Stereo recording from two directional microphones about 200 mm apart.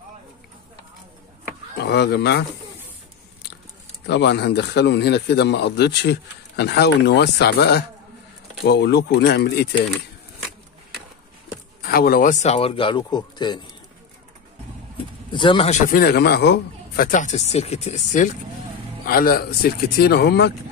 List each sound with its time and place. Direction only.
1.8 s a man's voice: 60° left (ahead or behind)
4.0 s a man's voice: 55° left (ahead or behind)
11.8 s speech: 50° left (ahead or behind); by 13.6 s 20° left (ahead or behind)
15.3 s speech: 25° left (ahead or behind)
15.9 s speech: 50° left (ahead or behind)
19.0 s a man's voice: 45° left (ahead or behind)